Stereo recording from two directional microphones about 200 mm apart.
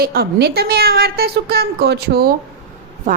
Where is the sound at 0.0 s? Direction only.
50° right (ahead or behind).